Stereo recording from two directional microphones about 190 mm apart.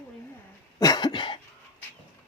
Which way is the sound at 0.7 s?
20° left (ahead or behind).